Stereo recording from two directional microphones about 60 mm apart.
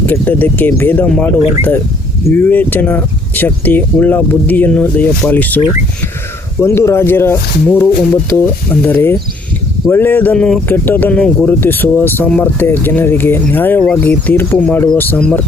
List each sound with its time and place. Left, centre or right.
0.0 s speech: left
6.6 s speech: left
10.3 s speech: centre
10.7 s speech: left
13.7 s speech: centre
14.0 s speech: left